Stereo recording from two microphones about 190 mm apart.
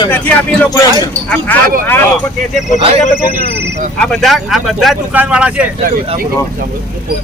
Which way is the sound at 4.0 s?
Centre (ahead or behind).